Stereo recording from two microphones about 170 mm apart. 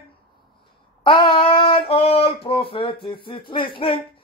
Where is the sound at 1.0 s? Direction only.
30° left (ahead or behind).